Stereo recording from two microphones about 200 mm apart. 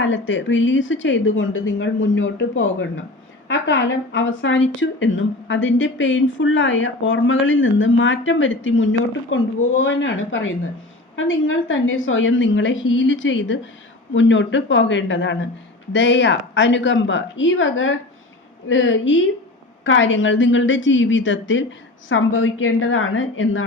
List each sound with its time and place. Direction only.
0.0 s a woman's voice: 70° left (ahead or behind)
22.1 s a woman's voice: 80° left